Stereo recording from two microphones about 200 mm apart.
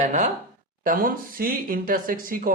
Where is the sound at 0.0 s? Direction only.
35° right (ahead or behind).